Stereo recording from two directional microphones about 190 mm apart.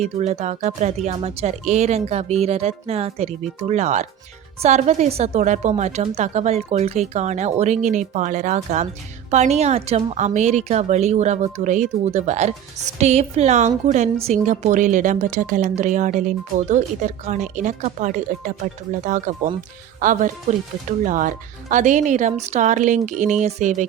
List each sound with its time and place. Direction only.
0.0 s a woman's voice: 35° right (ahead or behind)
20.0 s a woman's voice: 40° right (ahead or behind)